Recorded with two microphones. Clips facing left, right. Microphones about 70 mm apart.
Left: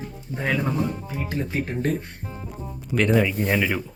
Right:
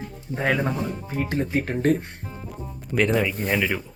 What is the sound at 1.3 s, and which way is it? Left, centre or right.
Speech, right.